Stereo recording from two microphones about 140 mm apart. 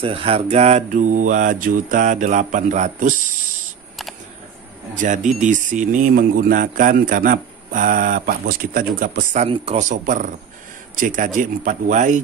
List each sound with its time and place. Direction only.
0.0 s mantra: 40° right (ahead or behind); by 3.2 s 65° right (ahead or behind)
4.9 s mantra: 60° right (ahead or behind)
5.4 s a man's voice: 65° right (ahead or behind); by 9.4 s 80° right
9.4 s a man's voice: 50° right (ahead or behind)
9.8 s a man's voice: 65° right (ahead or behind)